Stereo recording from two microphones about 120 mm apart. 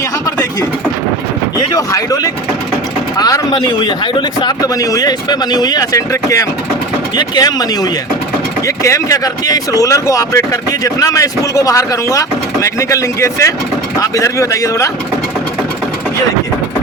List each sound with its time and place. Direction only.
1.5 s speech: 30° left (ahead or behind)